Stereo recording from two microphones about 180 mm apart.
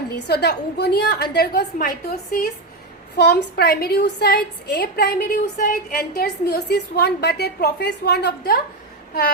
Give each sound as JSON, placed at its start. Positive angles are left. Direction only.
{"t": 0.1, "sound": "a woman's voice", "side_deg": 60}
{"t": 3.2, "sound": "a woman's voice", "side_deg": 65}